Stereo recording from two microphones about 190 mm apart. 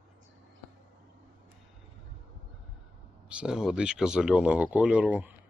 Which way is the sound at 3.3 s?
5° right (ahead or behind).